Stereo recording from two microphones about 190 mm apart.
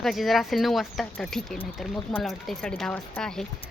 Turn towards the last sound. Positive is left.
turn(degrees=5)  # may be behind; listen again after turning